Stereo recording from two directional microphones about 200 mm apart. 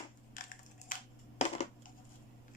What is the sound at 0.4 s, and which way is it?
Crushing, 45° left (ahead or behind).